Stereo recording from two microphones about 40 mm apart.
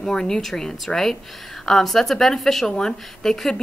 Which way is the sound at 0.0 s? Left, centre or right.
Centre.